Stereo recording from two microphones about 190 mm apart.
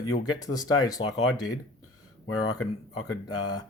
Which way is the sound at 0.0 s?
20° left (ahead or behind).